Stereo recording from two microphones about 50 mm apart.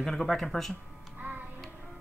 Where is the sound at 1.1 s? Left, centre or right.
Right.